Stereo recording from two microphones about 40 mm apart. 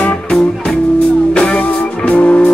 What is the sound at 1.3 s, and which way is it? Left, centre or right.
Music, left.